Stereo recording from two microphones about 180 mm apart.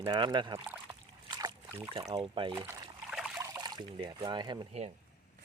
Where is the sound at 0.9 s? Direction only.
20° right (ahead or behind).